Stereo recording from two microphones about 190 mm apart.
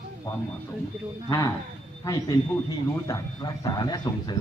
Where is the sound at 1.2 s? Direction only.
20° left (ahead or behind).